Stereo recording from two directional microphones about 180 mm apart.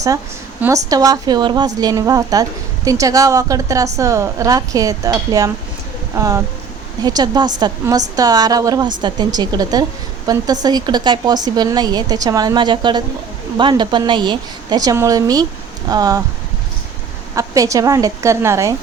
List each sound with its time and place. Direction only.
0.9 s a woman's voice: 20° right (ahead or behind)
17.3 s a woman's voice: 20° right (ahead or behind)